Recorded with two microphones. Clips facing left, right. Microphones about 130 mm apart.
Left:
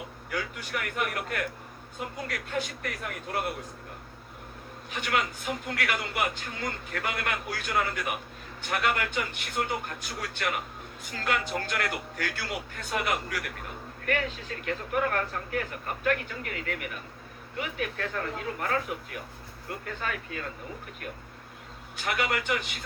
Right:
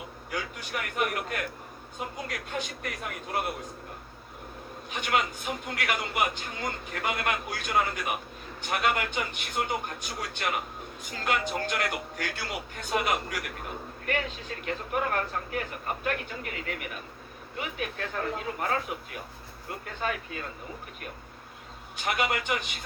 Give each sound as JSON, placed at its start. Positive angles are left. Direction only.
{"t": 0.3, "sound": "a man's voice", "side_deg": -20}
{"t": 4.9, "sound": "a man's voice", "side_deg": -20}
{"t": 21.9, "sound": "a man's voice", "side_deg": -20}